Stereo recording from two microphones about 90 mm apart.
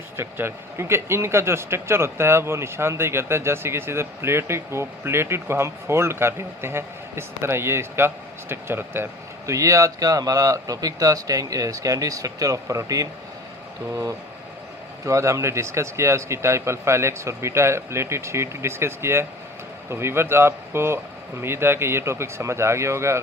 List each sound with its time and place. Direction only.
0.2 s speech: 30° right (ahead or behind)
9.5 s speech: 35° right (ahead or behind)